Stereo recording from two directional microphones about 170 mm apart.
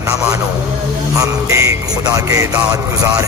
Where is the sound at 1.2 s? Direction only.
20° right (ahead or behind).